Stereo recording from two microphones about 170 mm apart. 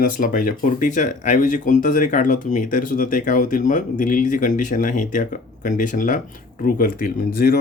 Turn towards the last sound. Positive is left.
turn(degrees=60)  # may be behind; listen again after turning